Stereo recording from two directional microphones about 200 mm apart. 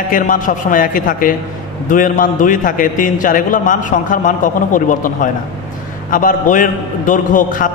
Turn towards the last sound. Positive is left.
turn(degrees=40)  # may be behind; listen again after turning